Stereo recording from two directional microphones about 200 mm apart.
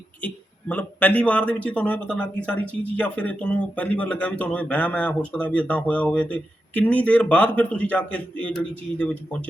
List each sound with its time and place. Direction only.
0.2 s speech: 10° left (ahead or behind)